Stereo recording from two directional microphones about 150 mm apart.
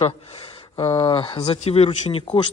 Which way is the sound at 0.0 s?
40° left (ahead or behind).